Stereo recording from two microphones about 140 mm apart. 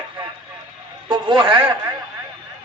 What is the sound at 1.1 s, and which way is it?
Speech, 35° right (ahead or behind).